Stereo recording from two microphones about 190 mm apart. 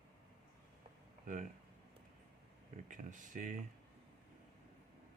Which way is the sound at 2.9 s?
45° right (ahead or behind).